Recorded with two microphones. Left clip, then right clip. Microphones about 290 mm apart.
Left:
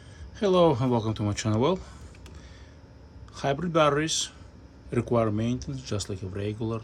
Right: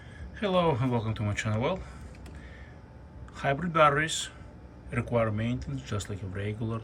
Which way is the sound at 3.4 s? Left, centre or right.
Centre.